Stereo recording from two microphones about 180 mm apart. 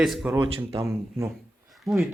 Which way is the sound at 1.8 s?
5° right (ahead or behind).